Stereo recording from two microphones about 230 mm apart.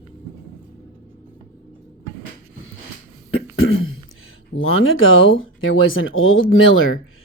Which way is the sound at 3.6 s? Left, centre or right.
Left.